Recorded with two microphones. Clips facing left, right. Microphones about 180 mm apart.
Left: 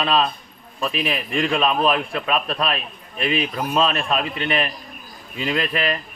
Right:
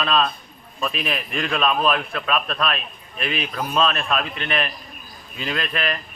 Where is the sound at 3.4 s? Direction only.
10° left (ahead or behind).